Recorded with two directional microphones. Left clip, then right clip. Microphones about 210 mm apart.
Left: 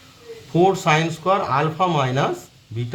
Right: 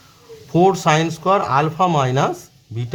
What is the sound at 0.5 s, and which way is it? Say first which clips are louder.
Speech: right 2 dB; 30° right (ahead or behind).